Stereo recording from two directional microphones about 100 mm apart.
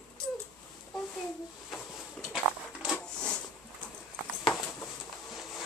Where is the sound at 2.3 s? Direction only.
5° right (ahead or behind).